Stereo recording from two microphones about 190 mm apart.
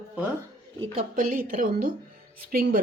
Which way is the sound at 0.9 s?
45° right (ahead or behind).